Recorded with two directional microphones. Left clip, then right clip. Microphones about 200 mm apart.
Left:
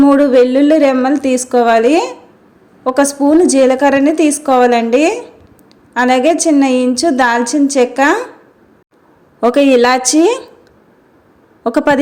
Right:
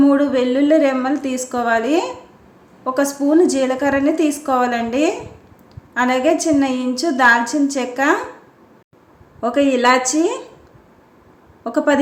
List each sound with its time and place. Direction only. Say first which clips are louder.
0.0 s a woman's voice: left 7 dB; 35° left (ahead or behind)
9.4 s a woman's voice: left 7 dB; 45° left (ahead or behind)
11.6 s a woman's voice: left 5 dB; 45° left (ahead or behind)